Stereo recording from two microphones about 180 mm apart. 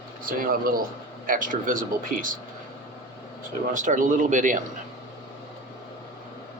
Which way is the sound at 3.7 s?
45° right (ahead or behind).